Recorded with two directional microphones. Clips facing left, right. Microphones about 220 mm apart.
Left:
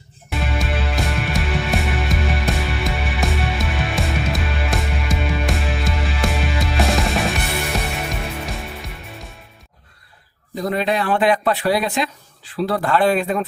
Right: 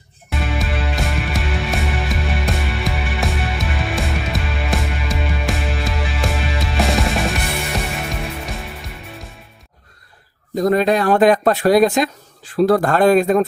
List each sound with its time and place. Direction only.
0.3 s music: centre (ahead or behind)
10.6 s speech: 45° right (ahead or behind)